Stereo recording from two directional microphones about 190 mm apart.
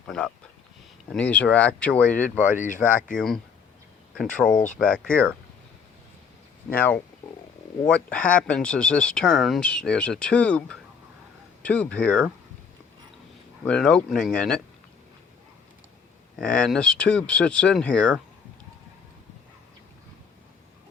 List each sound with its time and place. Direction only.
0.1 s speech: 5° left (ahead or behind)
2.6 s speech: 45° left (ahead or behind)
3.2 s speech: 5° left (ahead or behind)
6.7 s speech: 10° left (ahead or behind)
13.7 s speech: 5° left (ahead or behind)
16.4 s speech: 5° left (ahead or behind)